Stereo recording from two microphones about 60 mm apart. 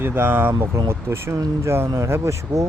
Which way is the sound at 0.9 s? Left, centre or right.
Right.